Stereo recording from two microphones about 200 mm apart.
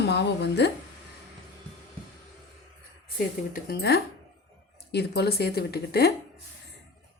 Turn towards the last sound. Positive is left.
turn(degrees=50)  # may be behind; listen again after turning